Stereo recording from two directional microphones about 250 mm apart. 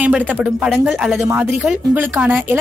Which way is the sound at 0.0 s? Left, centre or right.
Centre.